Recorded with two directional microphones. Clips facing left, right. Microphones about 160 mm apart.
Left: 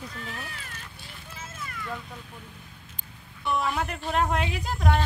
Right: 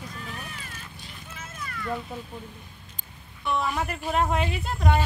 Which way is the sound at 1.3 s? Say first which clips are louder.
Right 1 dB; 25° left (ahead or behind).